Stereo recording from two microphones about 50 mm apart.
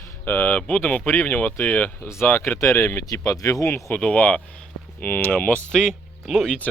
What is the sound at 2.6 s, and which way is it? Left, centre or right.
Speech, left.